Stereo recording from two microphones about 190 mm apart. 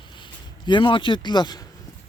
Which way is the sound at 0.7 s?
25° left (ahead or behind).